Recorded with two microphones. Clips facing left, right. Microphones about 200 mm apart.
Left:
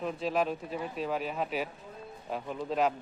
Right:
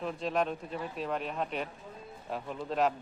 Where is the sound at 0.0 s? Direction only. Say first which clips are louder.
Left 1 dB; centre (ahead or behind).